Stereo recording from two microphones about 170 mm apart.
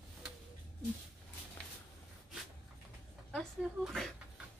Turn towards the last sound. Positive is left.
turn(degrees=0)  # may be behind; listen again after turning